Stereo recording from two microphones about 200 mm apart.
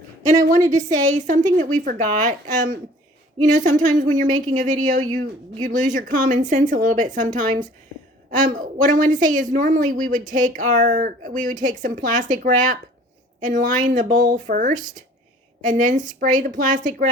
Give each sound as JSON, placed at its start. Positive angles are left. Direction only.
{"t": 0.3, "sound": "a woman's voice", "side_deg": -35}